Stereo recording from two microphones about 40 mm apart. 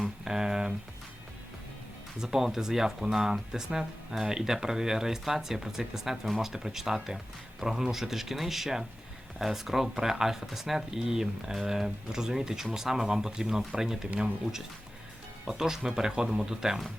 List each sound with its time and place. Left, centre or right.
0.0 s a sound: centre
2.2 s speech: centre
15.4 s speech: centre